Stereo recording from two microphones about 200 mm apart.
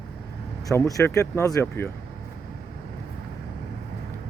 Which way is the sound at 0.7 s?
15° left (ahead or behind).